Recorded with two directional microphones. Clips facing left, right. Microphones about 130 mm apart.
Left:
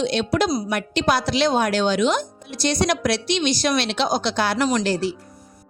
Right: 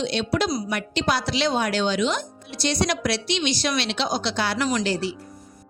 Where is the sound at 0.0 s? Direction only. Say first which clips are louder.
Left 3 dB; 50° left (ahead or behind).